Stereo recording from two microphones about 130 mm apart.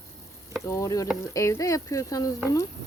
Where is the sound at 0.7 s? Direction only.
25° left (ahead or behind).